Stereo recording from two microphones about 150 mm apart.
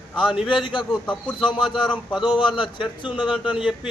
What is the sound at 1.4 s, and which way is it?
Speech, 35° left (ahead or behind).